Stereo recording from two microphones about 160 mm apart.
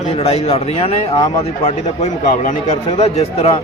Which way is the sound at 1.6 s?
45° left (ahead or behind).